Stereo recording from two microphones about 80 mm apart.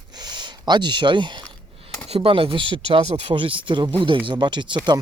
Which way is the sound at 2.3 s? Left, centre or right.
Right.